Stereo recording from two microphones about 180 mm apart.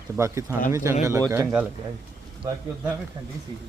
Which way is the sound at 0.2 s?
15° right (ahead or behind).